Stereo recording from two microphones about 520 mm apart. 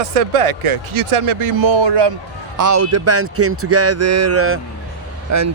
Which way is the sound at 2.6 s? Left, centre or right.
Right.